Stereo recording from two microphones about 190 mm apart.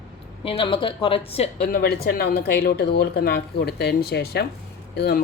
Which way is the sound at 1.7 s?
55° left (ahead or behind).